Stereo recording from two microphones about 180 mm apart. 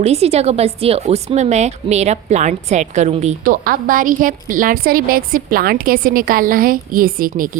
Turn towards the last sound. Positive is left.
turn(degrees=-50)  # may be behind; listen again after turning